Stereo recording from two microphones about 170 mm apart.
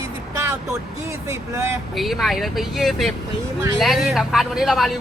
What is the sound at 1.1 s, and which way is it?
Speech, 15° right (ahead or behind).